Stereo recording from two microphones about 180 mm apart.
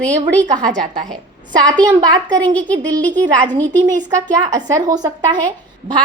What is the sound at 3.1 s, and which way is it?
Speech, 45° right (ahead or behind).